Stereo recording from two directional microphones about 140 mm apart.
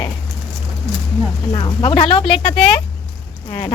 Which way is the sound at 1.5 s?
35° left (ahead or behind).